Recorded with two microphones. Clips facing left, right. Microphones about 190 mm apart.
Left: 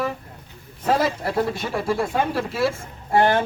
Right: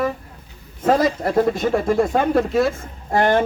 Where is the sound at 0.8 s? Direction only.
50° right (ahead or behind).